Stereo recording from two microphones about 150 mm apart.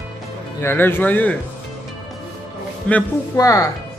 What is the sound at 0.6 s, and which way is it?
Speech, 15° left (ahead or behind).